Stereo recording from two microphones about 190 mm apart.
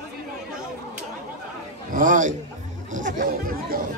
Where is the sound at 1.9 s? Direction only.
45° right (ahead or behind).